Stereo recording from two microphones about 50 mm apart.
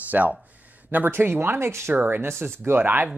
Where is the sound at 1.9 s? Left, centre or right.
Right.